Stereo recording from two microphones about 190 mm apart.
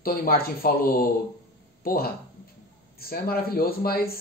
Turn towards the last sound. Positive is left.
turn(degrees=50)  # may be behind; listen again after turning